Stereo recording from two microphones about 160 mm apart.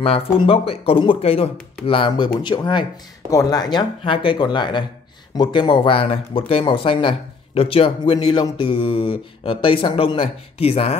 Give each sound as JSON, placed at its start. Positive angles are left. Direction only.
{"t": 0.0, "sound": "speech", "side_deg": 35}